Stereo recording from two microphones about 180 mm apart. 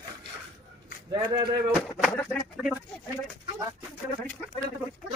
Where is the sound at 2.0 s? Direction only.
5° left (ahead or behind).